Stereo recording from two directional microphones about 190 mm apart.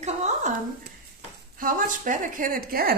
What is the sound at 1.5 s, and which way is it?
A woman's voice, 45° right (ahead or behind).